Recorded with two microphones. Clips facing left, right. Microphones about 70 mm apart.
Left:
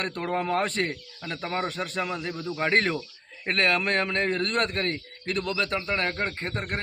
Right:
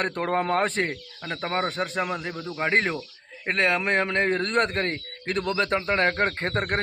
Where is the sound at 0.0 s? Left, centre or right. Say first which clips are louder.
Right 3 dB; right.